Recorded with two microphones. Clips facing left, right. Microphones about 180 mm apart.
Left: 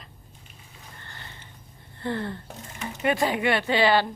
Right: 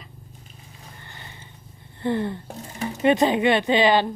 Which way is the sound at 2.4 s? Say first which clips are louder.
Right 6 dB; 35° right (ahead or behind).